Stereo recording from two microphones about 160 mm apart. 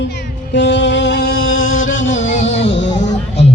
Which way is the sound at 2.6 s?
90° left.